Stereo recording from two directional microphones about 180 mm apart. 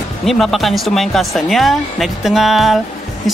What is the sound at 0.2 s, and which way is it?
Speech, centre (ahead or behind).